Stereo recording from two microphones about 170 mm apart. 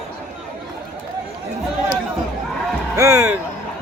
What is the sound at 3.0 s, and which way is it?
Speech, 20° right (ahead or behind).